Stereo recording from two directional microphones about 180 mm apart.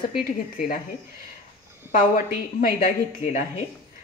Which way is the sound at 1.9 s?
50° left (ahead or behind).